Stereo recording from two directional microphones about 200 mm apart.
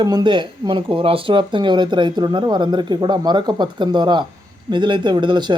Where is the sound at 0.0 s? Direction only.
20° right (ahead or behind).